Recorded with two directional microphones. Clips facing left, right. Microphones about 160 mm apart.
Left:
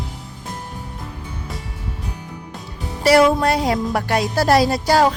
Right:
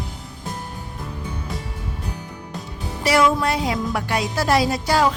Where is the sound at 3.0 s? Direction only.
35° left (ahead or behind).